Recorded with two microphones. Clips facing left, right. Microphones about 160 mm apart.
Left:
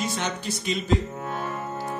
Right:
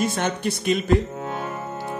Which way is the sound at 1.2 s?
20° right (ahead or behind).